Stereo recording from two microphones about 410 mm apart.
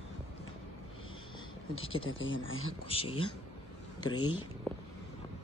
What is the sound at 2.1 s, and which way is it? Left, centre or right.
Speech, left.